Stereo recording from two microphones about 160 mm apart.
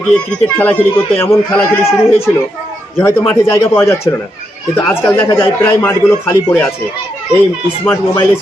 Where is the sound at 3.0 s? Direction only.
15° left (ahead or behind).